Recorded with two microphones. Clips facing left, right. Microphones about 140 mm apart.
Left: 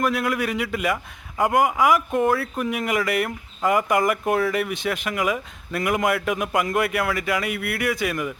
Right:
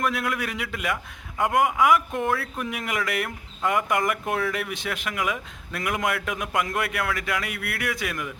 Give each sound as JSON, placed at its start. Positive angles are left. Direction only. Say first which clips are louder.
{"t": 0.0, "sound": "speech", "louder": "left 4 dB", "side_deg": 0}